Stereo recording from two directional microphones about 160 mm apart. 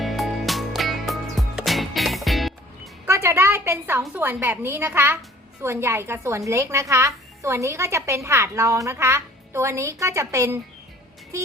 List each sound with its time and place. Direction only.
0.0 s music: centre (ahead or behind)
3.1 s a sound: 15° right (ahead or behind)
4.1 s a woman's voice: 10° right (ahead or behind)